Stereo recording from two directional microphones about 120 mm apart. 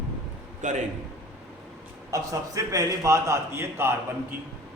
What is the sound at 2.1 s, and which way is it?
A man's voice, 30° right (ahead or behind).